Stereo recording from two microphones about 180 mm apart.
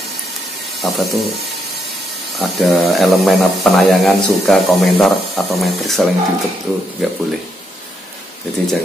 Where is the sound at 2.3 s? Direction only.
Centre (ahead or behind).